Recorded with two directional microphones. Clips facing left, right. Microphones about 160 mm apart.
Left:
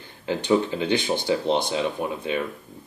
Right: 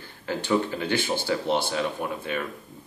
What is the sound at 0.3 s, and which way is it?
Speech, 20° left (ahead or behind).